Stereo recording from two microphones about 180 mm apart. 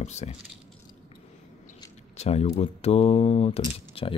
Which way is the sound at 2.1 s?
35° left (ahead or behind).